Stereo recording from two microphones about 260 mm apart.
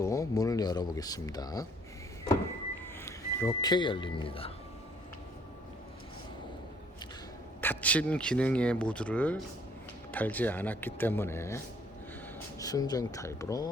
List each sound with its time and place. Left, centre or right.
0.0 s speech: centre
3.1 s speech: centre
7.6 s speech: centre